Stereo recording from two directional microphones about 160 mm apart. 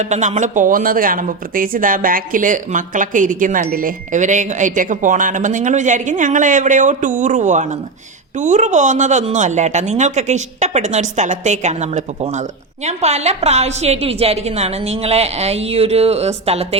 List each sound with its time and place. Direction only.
0.0 s a woman's voice: 45° right (ahead or behind)